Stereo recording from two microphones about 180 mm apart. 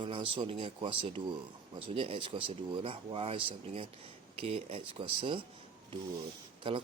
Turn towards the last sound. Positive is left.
turn(degrees=-30)  # may be behind; listen again after turning